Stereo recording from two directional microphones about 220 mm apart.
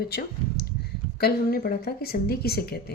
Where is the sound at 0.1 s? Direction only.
45° left (ahead or behind).